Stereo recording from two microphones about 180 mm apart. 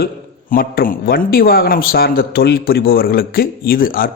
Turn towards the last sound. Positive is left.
turn(degrees=55)  # may be behind; listen again after turning